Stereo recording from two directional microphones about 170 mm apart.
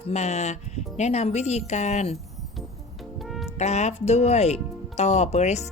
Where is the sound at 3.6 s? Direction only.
40° left (ahead or behind).